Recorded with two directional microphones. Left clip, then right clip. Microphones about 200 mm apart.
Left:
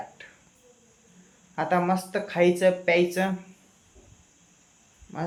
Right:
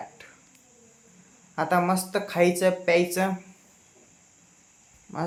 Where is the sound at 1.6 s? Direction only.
15° right (ahead or behind).